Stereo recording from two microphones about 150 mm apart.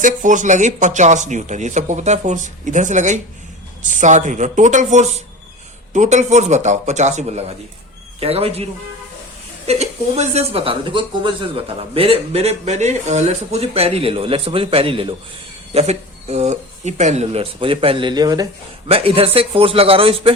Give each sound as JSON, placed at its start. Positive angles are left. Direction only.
{"t": 0.0, "sound": "speech", "side_deg": -60}
{"t": 9.6, "sound": "speech", "side_deg": -45}
{"t": 18.9, "sound": "speech", "side_deg": -40}